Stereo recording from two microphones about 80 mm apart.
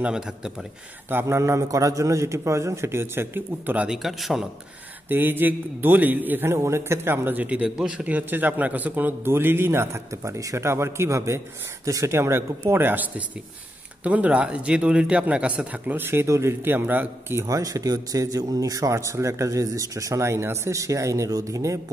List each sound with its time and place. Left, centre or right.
0.0 s a man's voice: centre
1.1 s a man's voice: right
3.8 s a man's voice: centre
5.1 s a man's voice: right
16.6 s a man's voice: right